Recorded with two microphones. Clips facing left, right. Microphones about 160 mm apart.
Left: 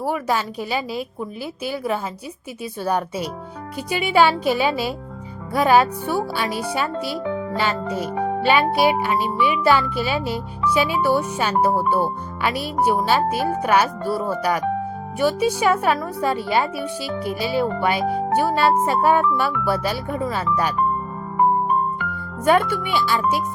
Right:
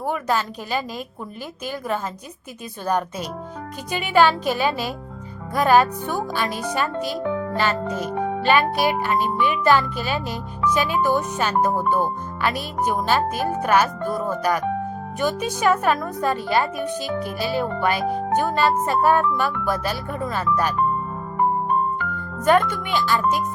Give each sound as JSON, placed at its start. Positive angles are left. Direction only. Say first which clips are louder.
{"t": 0.0, "sound": "speech", "louder": "left 1 dB", "side_deg": 10}
{"t": 2.8, "sound": "speech", "louder": "left 1 dB", "side_deg": 10}
{"t": 21.9, "sound": "speech", "louder": "even", "side_deg": 10}